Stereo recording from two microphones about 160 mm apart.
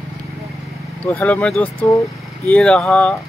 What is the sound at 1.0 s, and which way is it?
Speech, 10° left (ahead or behind).